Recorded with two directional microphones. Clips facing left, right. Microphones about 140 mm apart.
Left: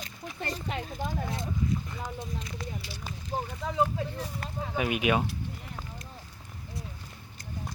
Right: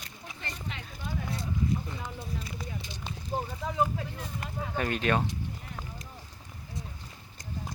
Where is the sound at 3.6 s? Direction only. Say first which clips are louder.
Left 1 dB; 5° right (ahead or behind).